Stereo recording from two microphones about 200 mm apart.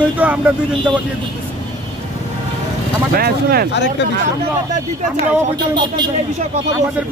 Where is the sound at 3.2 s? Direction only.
50° right (ahead or behind).